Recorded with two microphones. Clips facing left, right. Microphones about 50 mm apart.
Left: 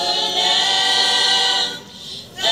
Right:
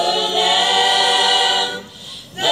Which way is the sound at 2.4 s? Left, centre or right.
Centre.